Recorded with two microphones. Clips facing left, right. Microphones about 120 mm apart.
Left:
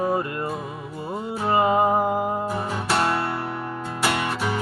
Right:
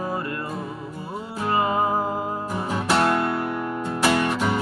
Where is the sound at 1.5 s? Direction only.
20° left (ahead or behind).